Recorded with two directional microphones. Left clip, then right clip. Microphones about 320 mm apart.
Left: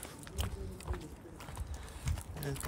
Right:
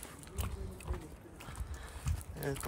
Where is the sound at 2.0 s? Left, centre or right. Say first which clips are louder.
Right 3 dB; centre.